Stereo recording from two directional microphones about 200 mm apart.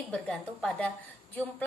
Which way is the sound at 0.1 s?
5° left (ahead or behind).